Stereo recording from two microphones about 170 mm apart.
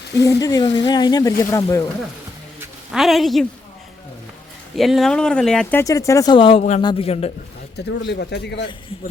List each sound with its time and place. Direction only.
0.3 s speech: 20° left (ahead or behind)
2.9 s speech: centre (ahead or behind)
4.8 s speech: centre (ahead or behind)
5.8 s speech: 20° left (ahead or behind)
6.6 s a man's voice: 45° left (ahead or behind)
7.9 s speech: 90° left